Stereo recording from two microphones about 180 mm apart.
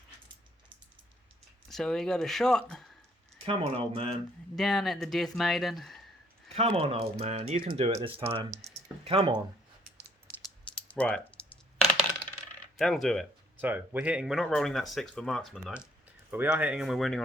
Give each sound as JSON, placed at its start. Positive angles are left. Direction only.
{"t": 1.7, "sound": "speech", "side_deg": 0}
{"t": 3.4, "sound": "speech", "side_deg": -35}
{"t": 4.5, "sound": "speech", "side_deg": 0}
{"t": 6.5, "sound": "speech", "side_deg": -35}
{"t": 10.8, "sound": "coin", "side_deg": 10}
{"t": 12.7, "sound": "speech", "side_deg": 0}
{"t": 13.6, "sound": "speech", "side_deg": -10}
{"t": 16.3, "sound": "speech", "side_deg": -10}